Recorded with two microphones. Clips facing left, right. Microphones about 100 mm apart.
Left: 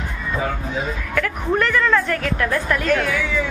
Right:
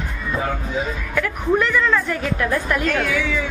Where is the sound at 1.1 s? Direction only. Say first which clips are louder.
Right 2 dB; 10° right (ahead or behind).